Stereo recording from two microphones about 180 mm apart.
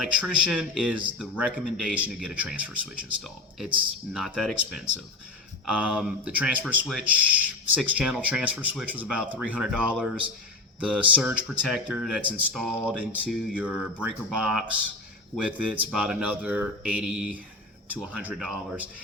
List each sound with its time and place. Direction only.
0.0 s speech: 5° right (ahead or behind)